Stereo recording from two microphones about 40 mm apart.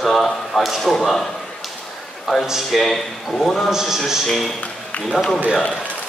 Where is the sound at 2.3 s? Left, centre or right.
Centre.